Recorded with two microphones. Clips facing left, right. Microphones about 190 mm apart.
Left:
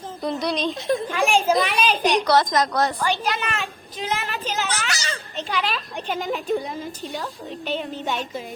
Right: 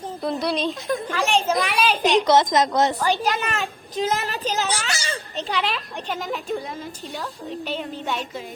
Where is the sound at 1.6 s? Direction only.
5° right (ahead or behind).